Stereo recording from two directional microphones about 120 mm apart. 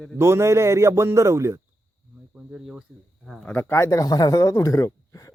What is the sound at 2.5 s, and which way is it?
Speech, 5° right (ahead or behind).